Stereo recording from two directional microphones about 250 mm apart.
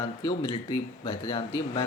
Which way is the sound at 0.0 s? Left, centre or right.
Centre.